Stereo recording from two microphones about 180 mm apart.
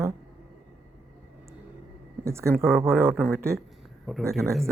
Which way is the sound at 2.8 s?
15° right (ahead or behind).